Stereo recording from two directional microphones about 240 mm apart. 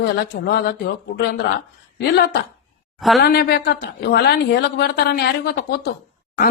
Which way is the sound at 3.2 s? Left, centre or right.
Left.